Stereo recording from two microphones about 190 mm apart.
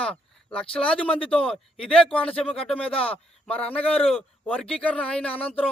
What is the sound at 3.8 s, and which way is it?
Speech, 10° left (ahead or behind).